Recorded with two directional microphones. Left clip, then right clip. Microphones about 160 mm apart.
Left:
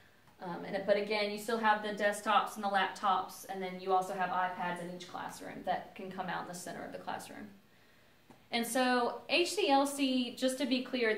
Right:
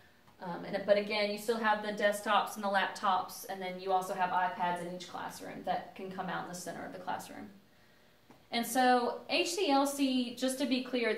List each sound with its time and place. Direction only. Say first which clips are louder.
0.4 s a woman's voice: right 1 dB; 15° right (ahead or behind)
5.7 s a woman's voice: even; 5° left (ahead or behind)
6.1 s a woman's voice: even; 25° left (ahead or behind)
8.5 s a woman's voice: right 3 dB; 30° left (ahead or behind); by 11.1 s 10° left (ahead or behind)